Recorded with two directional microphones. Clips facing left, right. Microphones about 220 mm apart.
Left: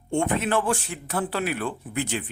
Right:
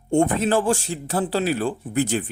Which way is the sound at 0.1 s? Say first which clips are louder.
Right 5 dB; 35° right (ahead or behind).